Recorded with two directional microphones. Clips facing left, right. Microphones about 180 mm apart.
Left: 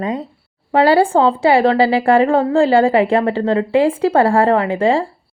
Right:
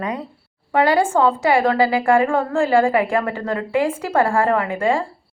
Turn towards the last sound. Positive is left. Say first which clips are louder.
# left 4 dB
turn(degrees=30)  # may be behind; listen again after turning